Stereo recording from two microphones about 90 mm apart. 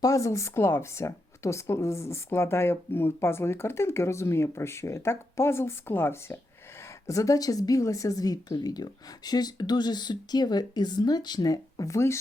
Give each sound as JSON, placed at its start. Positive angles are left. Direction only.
{"t": 0.0, "sound": "a woman's voice", "side_deg": 35}
{"t": 7.1, "sound": "speech", "side_deg": 40}